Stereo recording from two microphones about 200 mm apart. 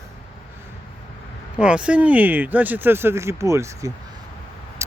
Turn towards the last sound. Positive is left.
turn(degrees=-15)  # may be behind; listen again after turning